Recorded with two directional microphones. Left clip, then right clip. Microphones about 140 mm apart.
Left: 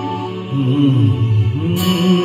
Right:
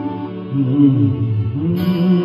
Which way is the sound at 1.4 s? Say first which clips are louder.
Left 2 dB; 30° right (ahead or behind).